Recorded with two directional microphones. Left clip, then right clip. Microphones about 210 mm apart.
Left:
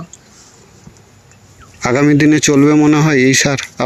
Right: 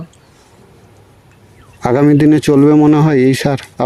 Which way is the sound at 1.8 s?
20° right (ahead or behind).